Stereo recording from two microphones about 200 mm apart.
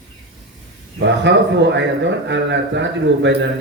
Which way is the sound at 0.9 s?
60° right (ahead or behind).